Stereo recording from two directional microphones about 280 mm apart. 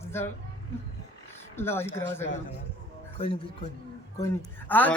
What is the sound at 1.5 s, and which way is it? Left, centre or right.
Speech, centre.